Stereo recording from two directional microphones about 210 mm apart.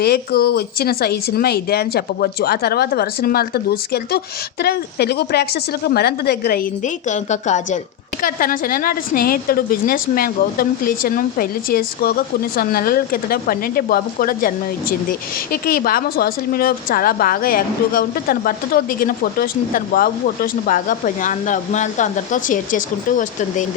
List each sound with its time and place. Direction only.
0.0 s a woman's voice: 50° left (ahead or behind)